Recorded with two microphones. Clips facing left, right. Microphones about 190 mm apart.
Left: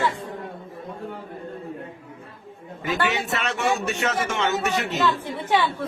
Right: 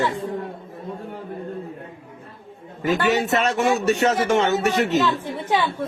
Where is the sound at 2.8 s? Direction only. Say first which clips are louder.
Right 5 dB; 45° right (ahead or behind).